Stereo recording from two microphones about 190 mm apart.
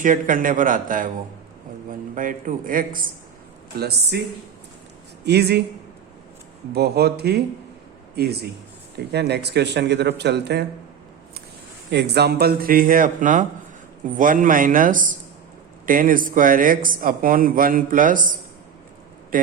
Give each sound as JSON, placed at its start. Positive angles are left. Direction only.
{"t": 0.0, "sound": "a man's voice", "side_deg": -45}
{"t": 3.8, "sound": "speech", "side_deg": -60}
{"t": 5.2, "sound": "speech", "side_deg": -60}
{"t": 6.7, "sound": "speech", "side_deg": -55}
{"t": 11.9, "sound": "a man's voice", "side_deg": -60}
{"t": 19.3, "sound": "speech", "side_deg": -45}